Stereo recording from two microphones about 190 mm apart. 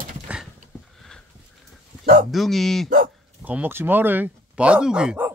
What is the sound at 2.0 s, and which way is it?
Bow-wow, 50° right (ahead or behind).